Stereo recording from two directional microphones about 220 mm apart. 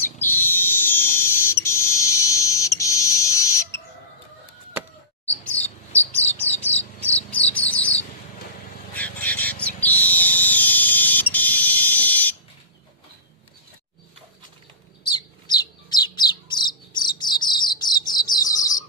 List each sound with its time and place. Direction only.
0.0 s a sound: 10° left (ahead or behind)
5.4 s chirp: 5° left (ahead or behind)
6.1 s bird: 10° left (ahead or behind)
8.9 s vehicle: 5° left (ahead or behind)
9.7 s fire alarm: 5° left (ahead or behind)
15.0 s bird: 20° left (ahead or behind)